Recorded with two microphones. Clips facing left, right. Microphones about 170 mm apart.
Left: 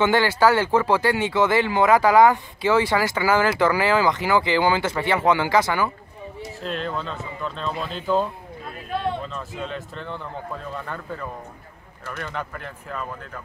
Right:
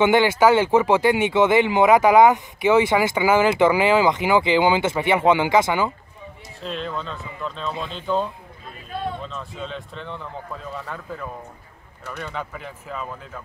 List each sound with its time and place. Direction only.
0.0 s speech: 20° right (ahead or behind)
6.6 s speech: centre (ahead or behind)
9.3 s speech: centre (ahead or behind)